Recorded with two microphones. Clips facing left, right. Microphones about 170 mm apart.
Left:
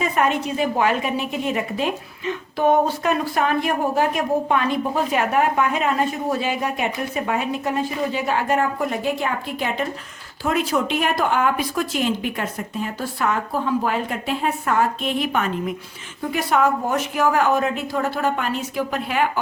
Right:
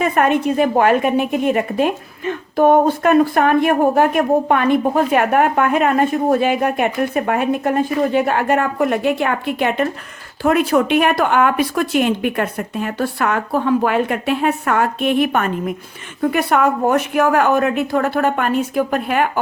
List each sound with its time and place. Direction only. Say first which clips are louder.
0.0 s a woman's voice: right 5 dB; 55° right (ahead or behind)